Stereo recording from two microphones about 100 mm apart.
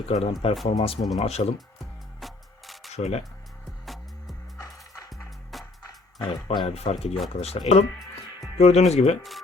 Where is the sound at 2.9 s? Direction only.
90° left.